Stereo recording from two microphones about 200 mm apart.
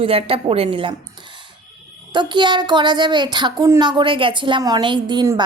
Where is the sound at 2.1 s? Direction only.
25° right (ahead or behind).